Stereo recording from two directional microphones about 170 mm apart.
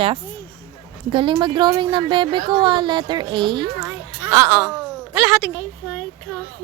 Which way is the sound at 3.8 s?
10° right (ahead or behind).